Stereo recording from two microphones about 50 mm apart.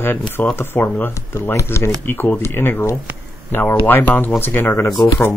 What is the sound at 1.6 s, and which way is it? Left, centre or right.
Speech, left.